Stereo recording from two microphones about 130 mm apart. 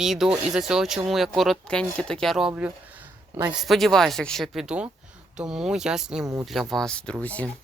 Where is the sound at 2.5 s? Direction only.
10° right (ahead or behind).